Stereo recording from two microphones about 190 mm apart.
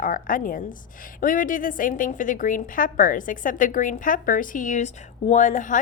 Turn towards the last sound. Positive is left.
turn(degrees=40)  # may be behind; listen again after turning